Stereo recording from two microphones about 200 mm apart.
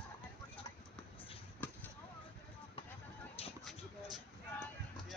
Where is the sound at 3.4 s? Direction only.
30° left (ahead or behind).